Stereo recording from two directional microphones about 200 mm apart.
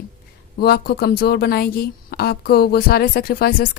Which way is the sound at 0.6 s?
50° left (ahead or behind).